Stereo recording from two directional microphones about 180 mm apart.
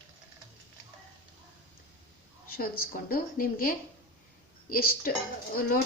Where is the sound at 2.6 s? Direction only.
55° left (ahead or behind).